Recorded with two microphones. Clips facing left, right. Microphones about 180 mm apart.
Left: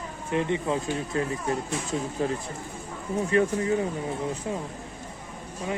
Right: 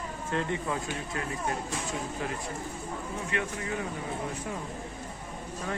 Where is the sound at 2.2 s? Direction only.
35° left (ahead or behind).